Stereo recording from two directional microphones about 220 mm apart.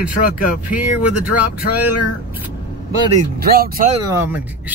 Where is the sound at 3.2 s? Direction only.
45° right (ahead or behind).